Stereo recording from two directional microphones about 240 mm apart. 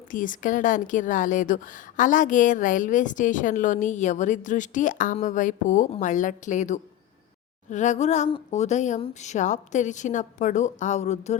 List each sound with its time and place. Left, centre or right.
0.1 s a woman's voice: left